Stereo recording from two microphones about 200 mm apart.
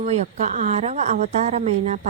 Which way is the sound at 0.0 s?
35° right (ahead or behind).